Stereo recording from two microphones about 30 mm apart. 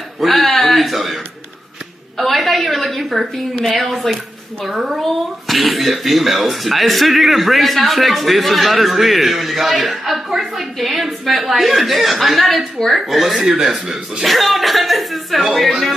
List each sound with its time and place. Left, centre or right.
0.2 s a child's voice: centre
4.6 s a child's voice: centre
13.4 s a man's voice: right
14.2 s a child's voice: centre